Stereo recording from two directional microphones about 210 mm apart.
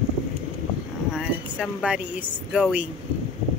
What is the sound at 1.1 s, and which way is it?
Speech, 5° right (ahead or behind).